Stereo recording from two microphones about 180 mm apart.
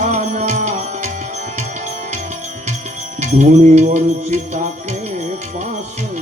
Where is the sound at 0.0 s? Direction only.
40° right (ahead or behind).